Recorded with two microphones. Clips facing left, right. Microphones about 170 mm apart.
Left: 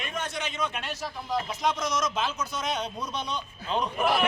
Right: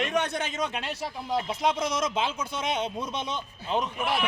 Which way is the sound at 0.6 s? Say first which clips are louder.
Right 1 dB; 30° right (ahead or behind).